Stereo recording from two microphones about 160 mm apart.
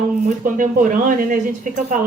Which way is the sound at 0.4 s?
55° right (ahead or behind).